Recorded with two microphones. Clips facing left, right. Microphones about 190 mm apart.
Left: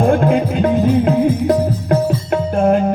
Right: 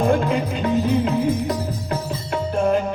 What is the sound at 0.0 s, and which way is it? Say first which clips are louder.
Music: left 5 dB; 50° left (ahead or behind).